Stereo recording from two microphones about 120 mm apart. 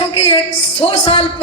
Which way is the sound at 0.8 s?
50° left (ahead or behind).